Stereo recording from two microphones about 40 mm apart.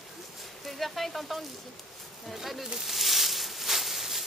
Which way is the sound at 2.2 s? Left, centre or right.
Centre.